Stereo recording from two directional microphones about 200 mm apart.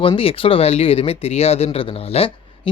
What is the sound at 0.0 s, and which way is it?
Speech, 25° left (ahead or behind).